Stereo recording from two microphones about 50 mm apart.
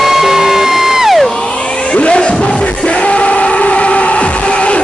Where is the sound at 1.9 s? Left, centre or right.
Centre.